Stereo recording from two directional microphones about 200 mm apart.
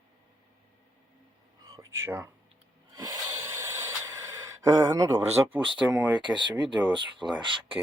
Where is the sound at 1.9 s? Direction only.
10° right (ahead or behind).